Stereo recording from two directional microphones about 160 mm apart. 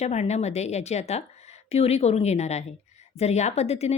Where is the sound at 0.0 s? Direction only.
45° left (ahead or behind).